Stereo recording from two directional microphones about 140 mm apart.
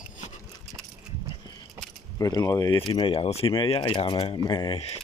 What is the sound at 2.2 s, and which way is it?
Speech, 25° left (ahead or behind).